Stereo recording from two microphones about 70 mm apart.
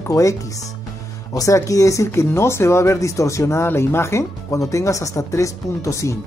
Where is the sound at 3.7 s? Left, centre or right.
Left.